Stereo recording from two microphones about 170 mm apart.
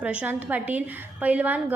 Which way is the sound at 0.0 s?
5° right (ahead or behind).